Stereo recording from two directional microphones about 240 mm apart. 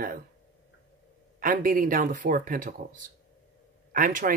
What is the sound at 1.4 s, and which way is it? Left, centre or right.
Speech, right.